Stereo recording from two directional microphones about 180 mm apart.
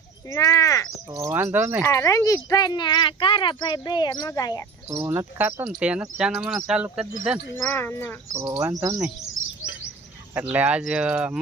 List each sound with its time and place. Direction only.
0.3 s speech: 20° left (ahead or behind)
1.1 s speech: 15° right (ahead or behind)
1.8 s speech: 15° left (ahead or behind)
4.9 s speech: 15° right (ahead or behind)
7.5 s speech: 10° left (ahead or behind)
8.3 s speech: 20° right (ahead or behind)
10.3 s speech: 10° right (ahead or behind)